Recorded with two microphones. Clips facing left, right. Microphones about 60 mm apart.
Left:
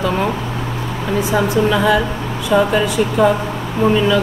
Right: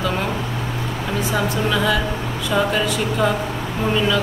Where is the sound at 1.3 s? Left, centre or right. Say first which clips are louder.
Left 6 dB; centre.